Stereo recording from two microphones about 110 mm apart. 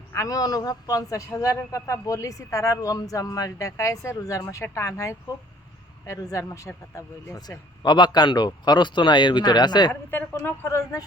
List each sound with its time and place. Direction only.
0.1 s a man's voice: 30° left (ahead or behind)
7.8 s a man's voice: 40° left (ahead or behind)
9.9 s a woman's voice: 20° left (ahead or behind)